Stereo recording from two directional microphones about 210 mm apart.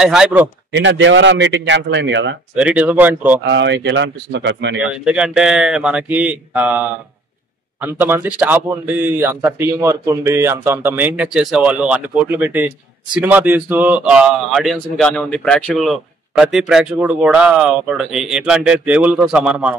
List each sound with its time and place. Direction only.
0.0 s a man's voice: 5° right (ahead or behind)
0.7 s a man's voice: 60° right (ahead or behind)
2.5 s a man's voice: 5° right (ahead or behind)
3.4 s a man's voice: 60° right (ahead or behind)
4.7 s a man's voice: 5° right (ahead or behind)